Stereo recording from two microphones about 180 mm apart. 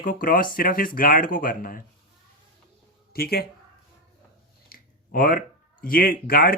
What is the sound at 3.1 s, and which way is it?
Speech, 55° left (ahead or behind).